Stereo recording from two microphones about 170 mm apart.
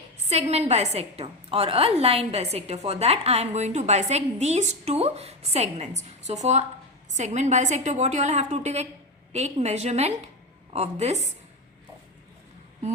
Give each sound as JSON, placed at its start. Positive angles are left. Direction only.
{"t": 0.3, "sound": "a woman's voice", "side_deg": -40}